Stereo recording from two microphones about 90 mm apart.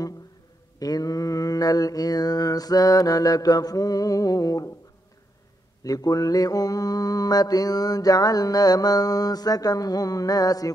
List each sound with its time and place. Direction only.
0.7 s mantra: 45° left (ahead or behind)
5.9 s mantra: 45° left (ahead or behind)